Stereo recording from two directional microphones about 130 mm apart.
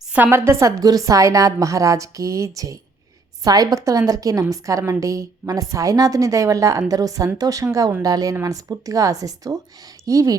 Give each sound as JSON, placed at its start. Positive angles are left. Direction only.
{"t": 0.1, "sound": "a woman's voice", "side_deg": -15}